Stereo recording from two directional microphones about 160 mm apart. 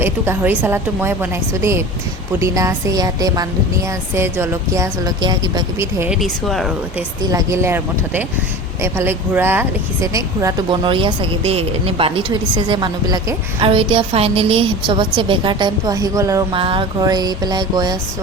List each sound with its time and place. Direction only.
0.0 s a woman's voice: 15° right (ahead or behind)
6.0 s speech: 5° right (ahead or behind)
7.3 s a woman's voice: 20° right (ahead or behind)
16.5 s speech: 35° right (ahead or behind)